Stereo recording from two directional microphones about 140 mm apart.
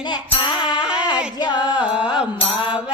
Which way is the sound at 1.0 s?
30° left (ahead or behind).